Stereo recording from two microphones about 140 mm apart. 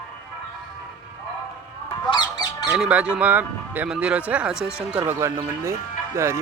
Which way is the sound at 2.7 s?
10° right (ahead or behind).